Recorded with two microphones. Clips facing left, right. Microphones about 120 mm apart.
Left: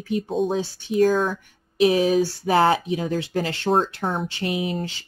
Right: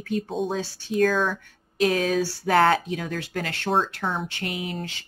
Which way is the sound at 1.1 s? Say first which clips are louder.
Left 2 dB; 5° left (ahead or behind).